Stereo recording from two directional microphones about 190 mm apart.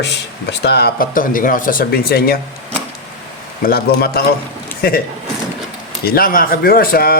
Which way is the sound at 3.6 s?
55° left (ahead or behind).